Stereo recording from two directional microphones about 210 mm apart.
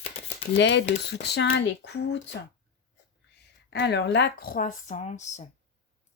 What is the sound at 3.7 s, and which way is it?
Speech, 55° left (ahead or behind).